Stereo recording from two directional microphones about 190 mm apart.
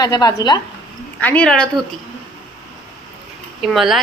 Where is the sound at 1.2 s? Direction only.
5° left (ahead or behind).